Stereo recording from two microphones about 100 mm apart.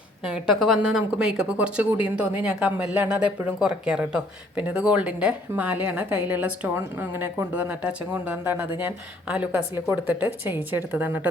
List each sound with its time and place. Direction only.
0.3 s a woman's voice: 5° right (ahead or behind)